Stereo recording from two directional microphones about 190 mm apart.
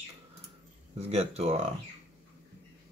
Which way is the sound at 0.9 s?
35° right (ahead or behind).